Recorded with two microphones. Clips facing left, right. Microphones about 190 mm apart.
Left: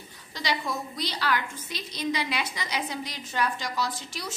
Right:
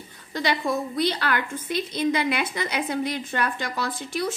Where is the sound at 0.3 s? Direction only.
55° right (ahead or behind).